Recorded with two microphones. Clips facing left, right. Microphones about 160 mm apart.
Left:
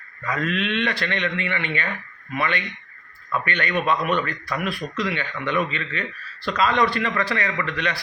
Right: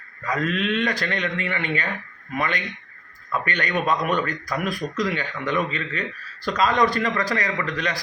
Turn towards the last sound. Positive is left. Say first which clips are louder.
# even
turn(degrees=-40)  # may be behind; listen again after turning